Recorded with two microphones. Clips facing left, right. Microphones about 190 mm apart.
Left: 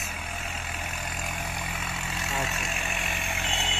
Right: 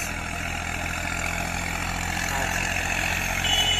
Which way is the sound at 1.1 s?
50° right (ahead or behind).